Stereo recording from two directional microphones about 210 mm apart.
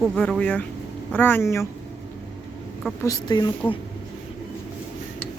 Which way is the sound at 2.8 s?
15° left (ahead or behind).